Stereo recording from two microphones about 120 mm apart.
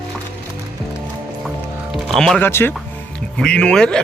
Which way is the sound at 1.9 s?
Centre (ahead or behind).